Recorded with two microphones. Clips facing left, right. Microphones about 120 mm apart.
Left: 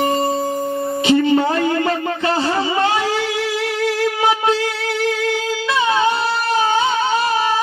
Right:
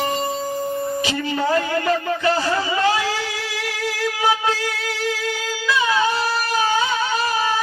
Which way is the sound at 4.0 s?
25° left (ahead or behind).